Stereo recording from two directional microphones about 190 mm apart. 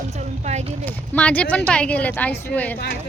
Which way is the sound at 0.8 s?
5° left (ahead or behind).